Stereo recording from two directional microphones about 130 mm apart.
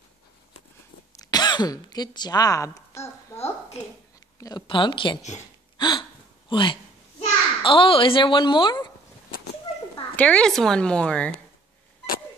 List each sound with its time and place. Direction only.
1.2 s speech: 30° left (ahead or behind)
4.4 s speech: 30° left (ahead or behind)
4.6 s speech: 40° left (ahead or behind)
5.8 s gasp: 35° left (ahead or behind)
6.5 s a sound: 40° left (ahead or behind)
10.1 s a woman's voice: 10° left (ahead or behind)